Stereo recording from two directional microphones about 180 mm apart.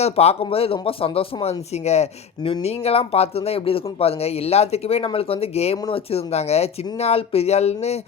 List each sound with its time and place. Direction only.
0.0 s speech: 35° left (ahead or behind)